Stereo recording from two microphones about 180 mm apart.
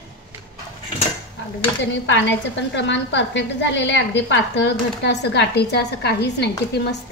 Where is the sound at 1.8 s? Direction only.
85° left.